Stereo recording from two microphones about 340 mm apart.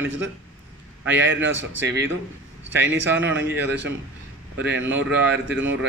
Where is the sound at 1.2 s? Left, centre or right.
Right.